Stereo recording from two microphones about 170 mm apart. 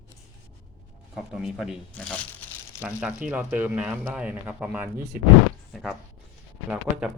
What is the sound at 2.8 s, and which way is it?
Speech, 5° right (ahead or behind).